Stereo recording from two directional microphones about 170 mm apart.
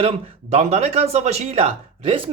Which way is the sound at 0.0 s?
40° right (ahead or behind).